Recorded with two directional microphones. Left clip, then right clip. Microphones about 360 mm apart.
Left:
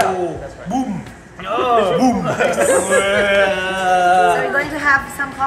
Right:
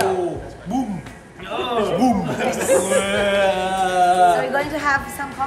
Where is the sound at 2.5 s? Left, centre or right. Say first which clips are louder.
Left 2 dB; centre.